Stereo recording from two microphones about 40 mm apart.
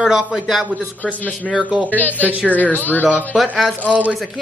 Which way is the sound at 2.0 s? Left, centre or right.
Left.